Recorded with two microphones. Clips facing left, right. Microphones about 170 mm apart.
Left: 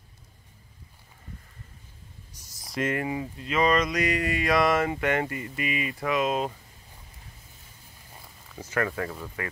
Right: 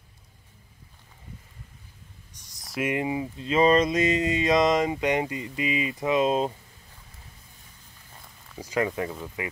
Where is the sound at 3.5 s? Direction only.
30° right (ahead or behind).